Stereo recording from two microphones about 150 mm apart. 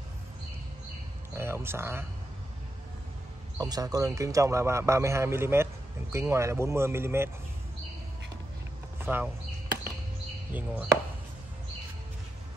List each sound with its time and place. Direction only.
1.3 s a sound: 15° right (ahead or behind)
3.5 s a man's voice: 25° right (ahead or behind)
9.0 s speech: 10° right (ahead or behind)
10.5 s speech: 10° right (ahead or behind)